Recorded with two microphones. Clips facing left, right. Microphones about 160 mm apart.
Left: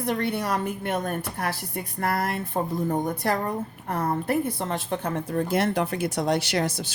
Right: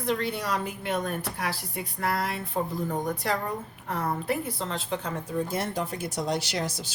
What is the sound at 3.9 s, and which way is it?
A woman's voice, 50° left (ahead or behind).